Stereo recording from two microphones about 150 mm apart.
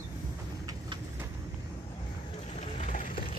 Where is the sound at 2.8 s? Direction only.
60° left (ahead or behind).